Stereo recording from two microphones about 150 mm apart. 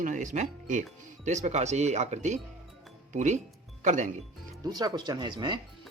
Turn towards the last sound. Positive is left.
turn(degrees=-30)  # may be behind; listen again after turning